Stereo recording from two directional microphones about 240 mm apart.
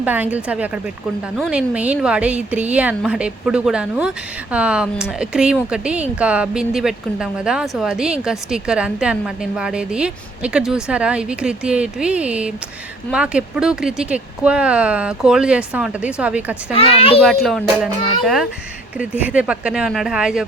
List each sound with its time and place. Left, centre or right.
0.0 s a woman's voice: centre
16.7 s a child's voice: left
17.4 s speech: centre